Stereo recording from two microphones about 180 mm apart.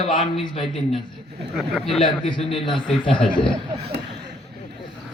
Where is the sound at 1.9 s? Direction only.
30° left (ahead or behind).